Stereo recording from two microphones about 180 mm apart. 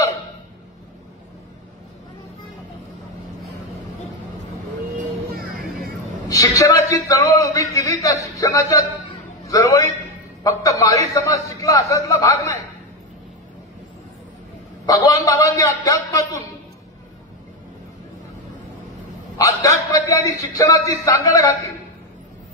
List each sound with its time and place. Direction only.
6.2 s a woman's voice: 20° left (ahead or behind)
10.4 s a man's voice: 20° left (ahead or behind)
14.9 s a man's voice: 20° left (ahead or behind)
19.3 s a man's voice: 20° left (ahead or behind)